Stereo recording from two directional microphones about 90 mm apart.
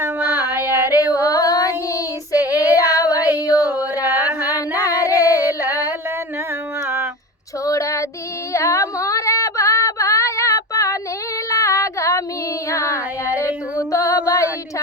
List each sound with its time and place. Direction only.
0.4 s child singing: 45° left (ahead or behind)
0.7 s female singing: 25° right (ahead or behind)
1.0 s a sound: 45° left (ahead or behind)
2.3 s child singing: 40° left (ahead or behind)
4.0 s music: 25° right (ahead or behind)
4.8 s singing: 40° left (ahead or behind)
6.8 s a sound: 25° right (ahead or behind)
7.6 s female singing: 35° left (ahead or behind)
11.4 s a sound: 35° left (ahead or behind)
12.6 s female singing: 35° left (ahead or behind)
13.7 s music: 40° left (ahead or behind)